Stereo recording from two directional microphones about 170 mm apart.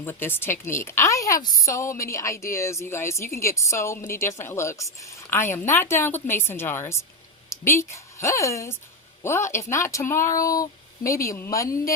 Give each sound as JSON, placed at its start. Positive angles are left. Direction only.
{"t": 0.0, "sound": "a woman's voice", "side_deg": 10}